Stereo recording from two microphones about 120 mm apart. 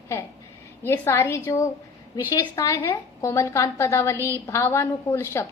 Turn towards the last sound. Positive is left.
turn(degrees=20)  # may be behind; listen again after turning